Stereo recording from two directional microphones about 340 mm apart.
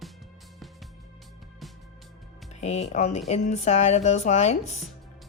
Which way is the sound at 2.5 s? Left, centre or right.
Centre.